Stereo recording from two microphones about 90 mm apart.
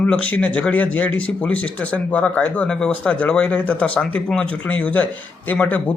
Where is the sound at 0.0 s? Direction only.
15° left (ahead or behind).